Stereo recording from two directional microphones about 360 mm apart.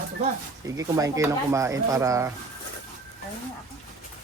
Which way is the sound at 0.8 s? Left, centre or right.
Centre.